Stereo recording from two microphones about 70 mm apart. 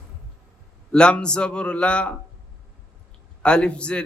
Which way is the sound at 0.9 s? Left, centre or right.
Centre.